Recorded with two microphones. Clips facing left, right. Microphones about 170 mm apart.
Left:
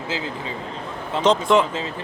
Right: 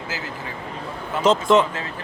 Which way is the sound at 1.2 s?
Centre (ahead or behind).